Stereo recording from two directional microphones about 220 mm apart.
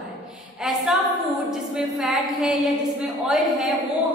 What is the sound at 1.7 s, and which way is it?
A woman's voice, centre (ahead or behind).